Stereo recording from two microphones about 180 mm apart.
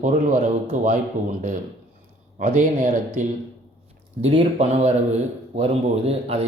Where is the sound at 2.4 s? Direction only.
45° right (ahead or behind).